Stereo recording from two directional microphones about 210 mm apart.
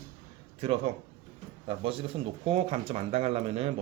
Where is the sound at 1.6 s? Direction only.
25° right (ahead or behind).